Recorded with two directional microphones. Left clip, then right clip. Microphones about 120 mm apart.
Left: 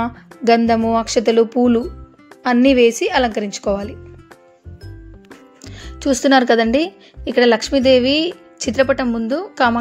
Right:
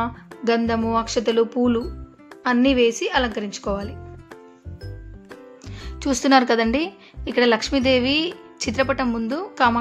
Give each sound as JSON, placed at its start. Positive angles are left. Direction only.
{"t": 0.0, "sound": "a woman's voice", "side_deg": 40}
{"t": 5.6, "sound": "music", "side_deg": 35}
{"t": 5.9, "sound": "speech", "side_deg": 15}